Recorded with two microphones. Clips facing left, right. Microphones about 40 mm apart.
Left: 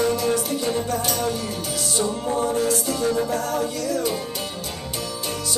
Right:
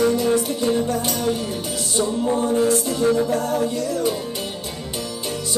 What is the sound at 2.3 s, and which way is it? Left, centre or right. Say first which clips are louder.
Music: right 2 dB; right.